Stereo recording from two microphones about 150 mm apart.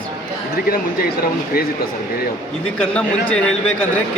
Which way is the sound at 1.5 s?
90° left.